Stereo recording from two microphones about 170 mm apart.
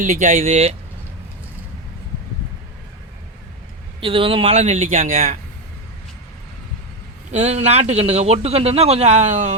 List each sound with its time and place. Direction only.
0.0 s speech: 50° right (ahead or behind)
4.0 s a man's voice: 30° right (ahead or behind)
7.3 s a man's voice: 40° right (ahead or behind)